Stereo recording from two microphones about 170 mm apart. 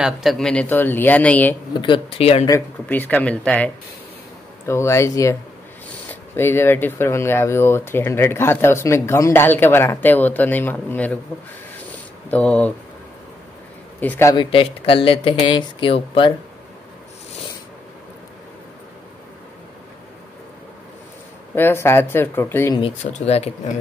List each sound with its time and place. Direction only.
0.0 s speech: centre (ahead or behind)
1.8 s speech: 30° left (ahead or behind)
2.9 s speech: 10° left (ahead or behind)
12.3 s speech: 10° left (ahead or behind)
13.9 s speech: 10° left (ahead or behind)
14.3 s speech: 30° left (ahead or behind)
21.5 s speech: 15° left (ahead or behind)
22.8 s speech: 35° left (ahead or behind)